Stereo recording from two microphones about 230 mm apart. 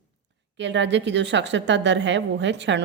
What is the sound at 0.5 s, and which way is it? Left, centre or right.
Speech, right.